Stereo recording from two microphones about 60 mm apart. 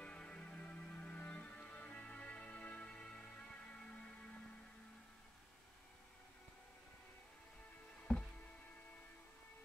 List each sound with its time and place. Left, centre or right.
0.0 s music: centre
8.1 s music: centre